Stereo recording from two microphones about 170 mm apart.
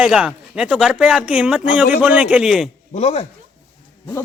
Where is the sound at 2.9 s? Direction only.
40° left (ahead or behind).